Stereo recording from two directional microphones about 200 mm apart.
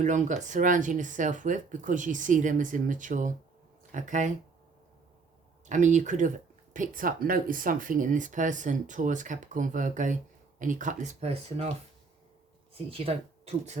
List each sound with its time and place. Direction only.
0.0 s speech: 40° right (ahead or behind)
5.6 s speech: 35° right (ahead or behind)
12.7 s speech: 30° right (ahead or behind)